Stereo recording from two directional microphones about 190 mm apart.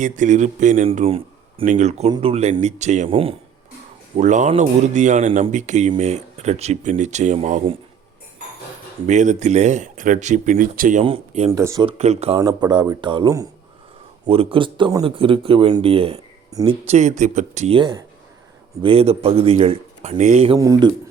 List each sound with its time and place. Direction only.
0.0 s speech: 40° right (ahead or behind)
0.9 s a sound: 30° right (ahead or behind)
1.6 s speech: 40° right (ahead or behind)
2.0 s speech: 25° right (ahead or behind)
4.2 s speech: 40° right (ahead or behind)
9.0 s speech: 40° right (ahead or behind)
11.0 s speech: 30° right (ahead or behind)
11.5 s speech: 20° right (ahead or behind)
11.9 s speech: 35° right (ahead or behind)
12.4 s speech: 20° right (ahead or behind)
16.5 s speech: 20° right (ahead or behind)
16.8 s speech: 35° right (ahead or behind)
20.6 s speech: 20° right (ahead or behind)